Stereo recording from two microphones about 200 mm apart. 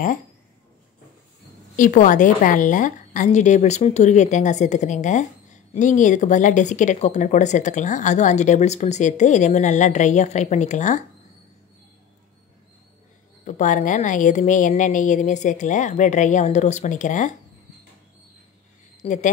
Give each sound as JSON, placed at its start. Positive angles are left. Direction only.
{"t": 1.8, "sound": "a woman's voice", "side_deg": 40}
{"t": 13.5, "sound": "a woman's voice", "side_deg": 40}
{"t": 19.0, "sound": "a woman's voice", "side_deg": 30}